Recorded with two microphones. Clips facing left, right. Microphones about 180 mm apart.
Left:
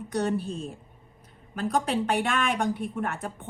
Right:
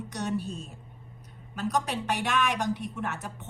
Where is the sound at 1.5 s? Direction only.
55° left (ahead or behind).